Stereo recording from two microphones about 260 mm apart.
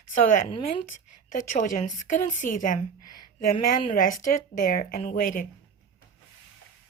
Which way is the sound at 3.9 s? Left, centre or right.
Left.